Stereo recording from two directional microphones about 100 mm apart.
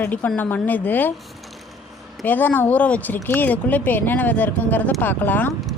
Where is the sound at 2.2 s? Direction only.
20° left (ahead or behind).